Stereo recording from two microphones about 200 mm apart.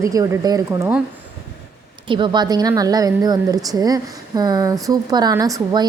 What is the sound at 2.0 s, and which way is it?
Speech, 25° right (ahead or behind).